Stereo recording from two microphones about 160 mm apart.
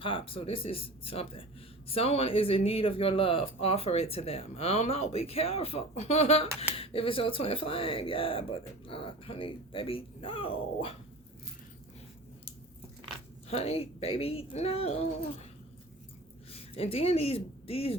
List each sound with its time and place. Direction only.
0.0 s speech: 35° left (ahead or behind)
13.5 s speech: 40° left (ahead or behind)
16.5 s speech: 40° left (ahead or behind)